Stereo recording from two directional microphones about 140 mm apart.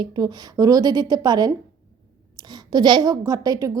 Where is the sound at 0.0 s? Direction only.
30° right (ahead or behind).